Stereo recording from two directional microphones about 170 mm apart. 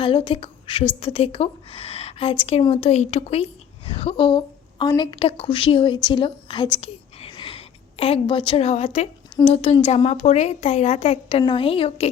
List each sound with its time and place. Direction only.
0.0 s a woman's voice: 30° left (ahead or behind)
7.3 s a sound: 30° left (ahead or behind)
9.4 s a woman's voice: 35° left (ahead or behind)